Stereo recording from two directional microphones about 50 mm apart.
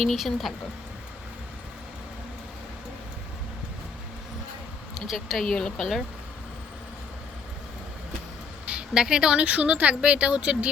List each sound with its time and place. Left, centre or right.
0.0 s speech: centre
4.9 s speech: centre
5.5 s speech: centre
8.9 s speech: centre
9.4 s speech: right